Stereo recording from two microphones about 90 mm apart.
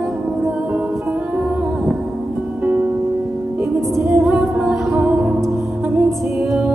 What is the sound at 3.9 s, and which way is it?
Music, 35° right (ahead or behind).